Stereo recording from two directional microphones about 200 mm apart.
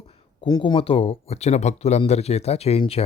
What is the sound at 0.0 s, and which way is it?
Speech, 25° left (ahead or behind).